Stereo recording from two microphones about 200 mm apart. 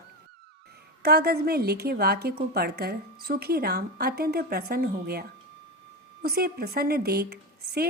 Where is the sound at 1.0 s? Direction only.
50° right (ahead or behind).